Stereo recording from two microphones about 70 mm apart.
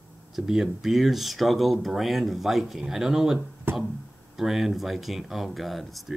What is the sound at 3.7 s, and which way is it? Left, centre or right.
Music, right.